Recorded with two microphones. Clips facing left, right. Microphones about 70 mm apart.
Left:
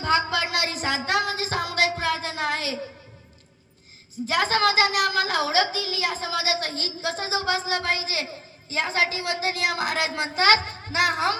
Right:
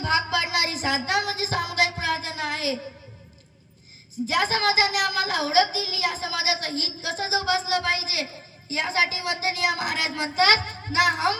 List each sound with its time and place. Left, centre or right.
0.0 s music: left
4.3 s a child's voice: left